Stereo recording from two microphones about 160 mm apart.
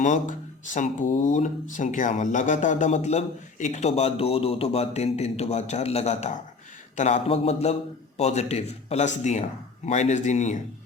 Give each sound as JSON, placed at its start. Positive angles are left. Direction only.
{"t": 0.0, "sound": "speech", "side_deg": 50}